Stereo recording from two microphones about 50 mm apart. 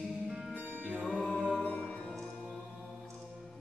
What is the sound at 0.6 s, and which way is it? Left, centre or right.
Music, right.